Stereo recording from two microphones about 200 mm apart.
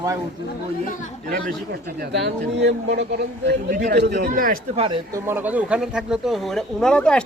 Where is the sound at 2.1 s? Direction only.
60° right (ahead or behind).